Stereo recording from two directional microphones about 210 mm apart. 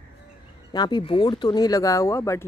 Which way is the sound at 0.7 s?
20° left (ahead or behind).